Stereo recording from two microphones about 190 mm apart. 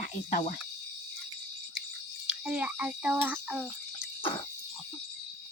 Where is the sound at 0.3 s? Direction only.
45° left (ahead or behind).